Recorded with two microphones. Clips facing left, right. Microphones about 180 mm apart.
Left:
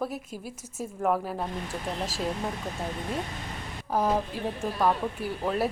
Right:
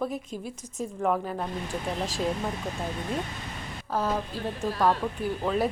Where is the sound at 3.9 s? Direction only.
15° left (ahead or behind).